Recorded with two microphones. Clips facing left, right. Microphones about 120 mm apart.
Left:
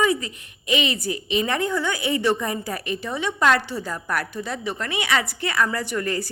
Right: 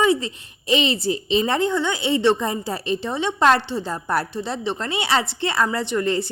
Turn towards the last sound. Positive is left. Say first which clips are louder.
# right 4 dB
turn(degrees=-25)  # may be behind; listen again after turning